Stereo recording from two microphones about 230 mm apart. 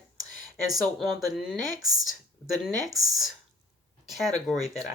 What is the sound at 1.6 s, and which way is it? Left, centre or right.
Speech, centre.